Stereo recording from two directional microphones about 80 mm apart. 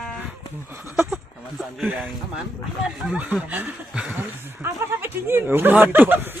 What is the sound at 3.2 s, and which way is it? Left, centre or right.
Speech, right.